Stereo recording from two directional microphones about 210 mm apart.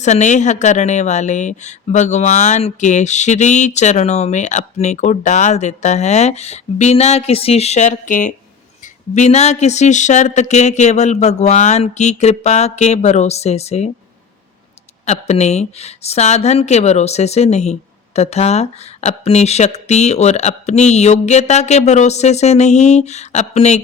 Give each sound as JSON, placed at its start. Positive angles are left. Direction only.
{"t": 0.0, "sound": "a woman's voice", "side_deg": 35}
{"t": 15.0, "sound": "a woman's voice", "side_deg": 30}